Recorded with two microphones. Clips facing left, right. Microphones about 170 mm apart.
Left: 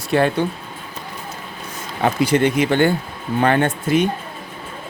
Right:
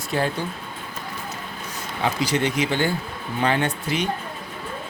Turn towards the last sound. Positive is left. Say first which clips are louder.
# left 7 dB
turn(degrees=50)  # may be behind; listen again after turning